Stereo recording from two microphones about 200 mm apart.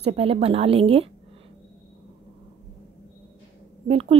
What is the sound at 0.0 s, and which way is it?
A woman's voice, 30° right (ahead or behind).